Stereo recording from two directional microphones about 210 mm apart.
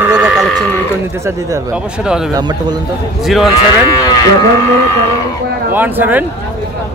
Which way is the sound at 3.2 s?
Centre (ahead or behind).